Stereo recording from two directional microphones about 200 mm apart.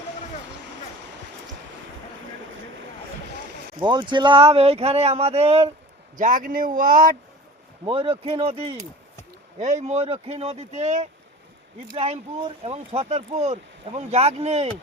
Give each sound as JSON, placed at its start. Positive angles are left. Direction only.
{"t": 3.8, "sound": "speech", "side_deg": -25}
{"t": 6.1, "sound": "speech", "side_deg": -40}
{"t": 7.9, "sound": "speech", "side_deg": -25}